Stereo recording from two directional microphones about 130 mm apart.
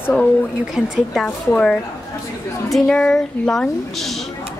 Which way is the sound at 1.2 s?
10° left (ahead or behind).